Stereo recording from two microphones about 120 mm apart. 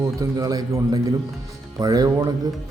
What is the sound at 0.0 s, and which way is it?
A man's voice, 30° right (ahead or behind).